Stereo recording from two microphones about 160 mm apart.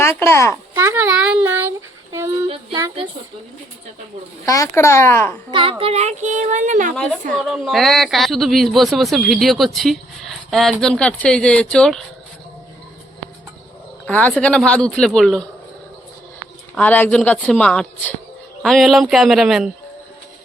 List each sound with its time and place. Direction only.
0.0 s a woman's voice: 15° left (ahead or behind)
0.7 s a sound: 15° right (ahead or behind)
2.1 s child singing: 15° right (ahead or behind)
4.4 s a woman's voice: 20° left (ahead or behind)
5.5 s speech: 35° right (ahead or behind); by 6.9 s 55° right (ahead or behind)
6.9 s speech: 5° left (ahead or behind)
14.1 s speech: 10° left (ahead or behind)
16.7 s a woman's voice: 10° left (ahead or behind)